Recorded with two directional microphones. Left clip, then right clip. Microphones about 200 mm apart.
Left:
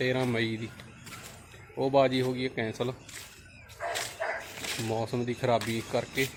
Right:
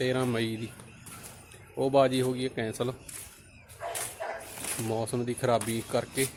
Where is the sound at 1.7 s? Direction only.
10° right (ahead or behind).